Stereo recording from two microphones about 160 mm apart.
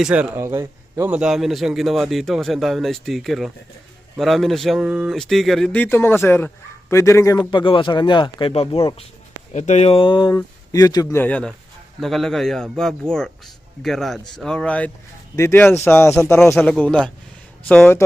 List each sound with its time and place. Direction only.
0.0 s a man's voice: 10° right (ahead or behind); by 11.2 s 20° left (ahead or behind)
11.2 s a man's voice: 10° left (ahead or behind)